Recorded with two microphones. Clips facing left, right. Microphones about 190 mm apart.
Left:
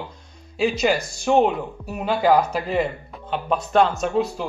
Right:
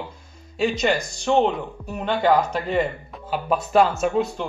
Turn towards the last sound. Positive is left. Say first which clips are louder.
# even
turn(degrees=0)  # may be behind; listen again after turning